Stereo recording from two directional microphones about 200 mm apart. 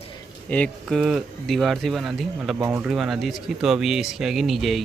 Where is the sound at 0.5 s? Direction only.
5° left (ahead or behind).